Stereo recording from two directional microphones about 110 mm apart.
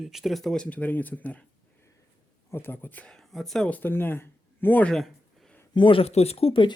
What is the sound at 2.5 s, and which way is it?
Speech, 20° left (ahead or behind).